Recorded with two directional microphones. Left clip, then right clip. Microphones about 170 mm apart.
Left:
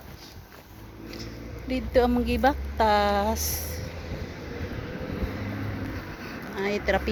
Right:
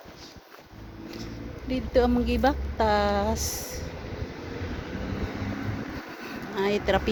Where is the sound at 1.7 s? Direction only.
15° left (ahead or behind).